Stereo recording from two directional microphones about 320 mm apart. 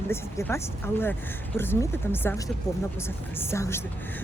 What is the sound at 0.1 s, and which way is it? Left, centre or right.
Speech, centre.